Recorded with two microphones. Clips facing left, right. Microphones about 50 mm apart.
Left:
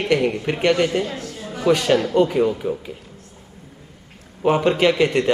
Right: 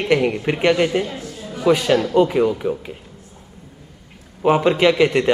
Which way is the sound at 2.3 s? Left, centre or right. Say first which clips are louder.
Right 1 dB; right.